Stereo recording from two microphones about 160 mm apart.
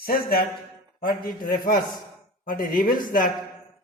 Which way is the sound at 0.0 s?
70° left (ahead or behind).